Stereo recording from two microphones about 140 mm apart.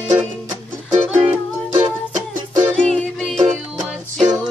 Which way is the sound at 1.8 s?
20° right (ahead or behind).